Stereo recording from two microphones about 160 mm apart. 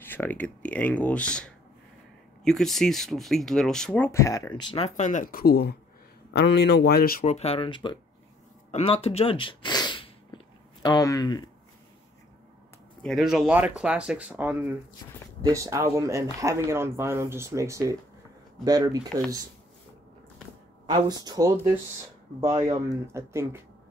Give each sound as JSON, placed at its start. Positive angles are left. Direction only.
{"t": 0.0, "sound": "speech", "side_deg": 10}
{"t": 4.1, "sound": "speech", "side_deg": 20}
{"t": 6.3, "sound": "speech", "side_deg": 90}
{"t": 7.2, "sound": "speech", "side_deg": 40}
{"t": 8.7, "sound": "a sound", "side_deg": 35}
{"t": 13.0, "sound": "speech", "side_deg": 0}
{"t": 21.1, "sound": "speech", "side_deg": -25}